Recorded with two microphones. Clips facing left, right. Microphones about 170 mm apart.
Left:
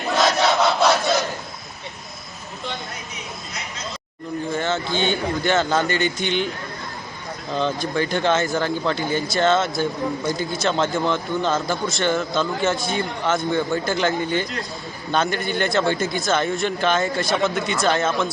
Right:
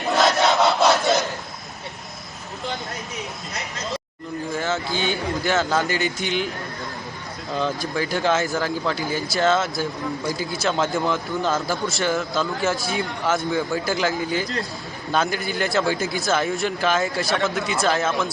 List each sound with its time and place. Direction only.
0.2 s crowd: centre (ahead or behind)
4.5 s a man's voice: 5° right (ahead or behind)
7.5 s a man's voice: 5° right (ahead or behind)